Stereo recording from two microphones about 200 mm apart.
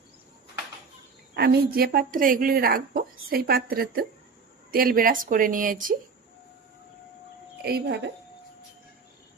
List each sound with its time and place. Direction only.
1.3 s a woman's voice: 50° right (ahead or behind)
7.6 s speech: 55° right (ahead or behind)